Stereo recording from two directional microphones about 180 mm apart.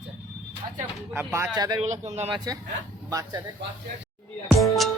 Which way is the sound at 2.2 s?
25° right (ahead or behind).